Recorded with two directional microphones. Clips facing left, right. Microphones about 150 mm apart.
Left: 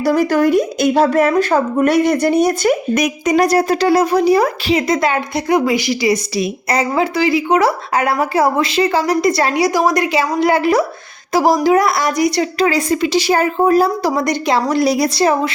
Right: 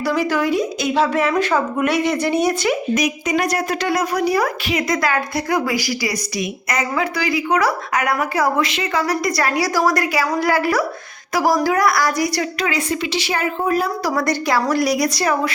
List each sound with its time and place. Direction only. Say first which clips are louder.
0.0 s a woman's voice: left 6 dB; 45° left (ahead or behind)
2.9 s a woman's voice: left 4 dB; 55° left (ahead or behind)
3.3 s a woman's voice: left 9 dB; 35° left (ahead or behind)
14.0 s a woman's voice: left 3 dB; 20° left (ahead or behind)